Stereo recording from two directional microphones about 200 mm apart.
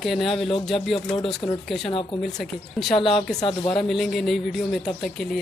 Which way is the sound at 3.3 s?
25° left (ahead or behind).